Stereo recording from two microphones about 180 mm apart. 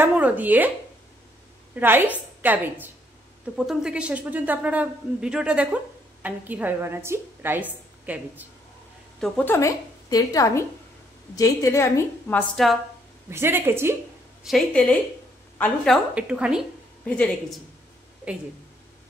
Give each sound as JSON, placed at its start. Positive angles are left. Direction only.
{"t": 0.0, "sound": "a woman's voice", "side_deg": -10}
{"t": 1.8, "sound": "a woman's voice", "side_deg": -10}
{"t": 9.2, "sound": "a woman's voice", "side_deg": 10}
{"t": 13.3, "sound": "a woman's voice", "side_deg": -15}
{"t": 14.4, "sound": "a woman's voice", "side_deg": 5}
{"t": 17.0, "sound": "a woman's voice", "side_deg": 5}